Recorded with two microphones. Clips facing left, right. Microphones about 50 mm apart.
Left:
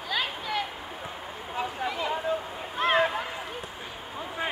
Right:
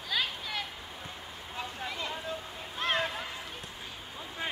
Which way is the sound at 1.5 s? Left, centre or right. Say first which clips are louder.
Left 7 dB; centre.